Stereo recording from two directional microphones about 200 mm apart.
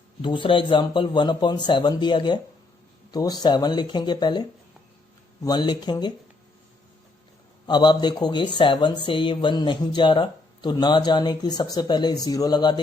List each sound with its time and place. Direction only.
0.2 s speech: 25° left (ahead or behind)
7.7 s speech: 20° left (ahead or behind)